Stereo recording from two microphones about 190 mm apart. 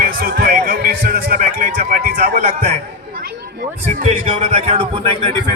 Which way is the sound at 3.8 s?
40° right (ahead or behind).